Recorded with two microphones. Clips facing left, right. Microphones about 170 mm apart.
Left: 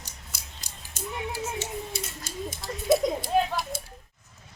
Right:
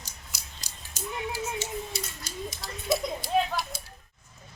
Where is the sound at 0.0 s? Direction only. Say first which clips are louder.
Left 1 dB; 55° left (ahead or behind).